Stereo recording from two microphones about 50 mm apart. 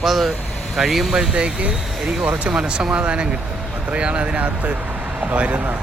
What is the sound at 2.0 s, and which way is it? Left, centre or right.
Speech, centre.